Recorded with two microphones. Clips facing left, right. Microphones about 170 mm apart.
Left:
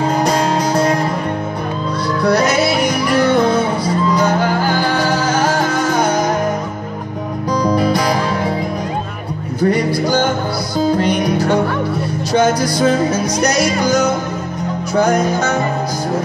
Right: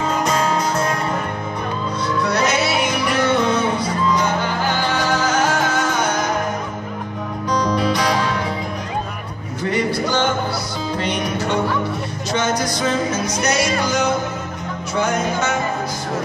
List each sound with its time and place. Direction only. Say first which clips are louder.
0.0 s music: left 4 dB; 35° left (ahead or behind)
2.3 s music: left 4 dB; 35° left (ahead or behind)
7.6 s music: left 5 dB; 40° left (ahead or behind)
9.6 s music: left 5 dB; 40° left (ahead or behind)
12.3 s speech: left 6 dB; 35° left (ahead or behind)
15.0 s music: left 6 dB; 35° left (ahead or behind)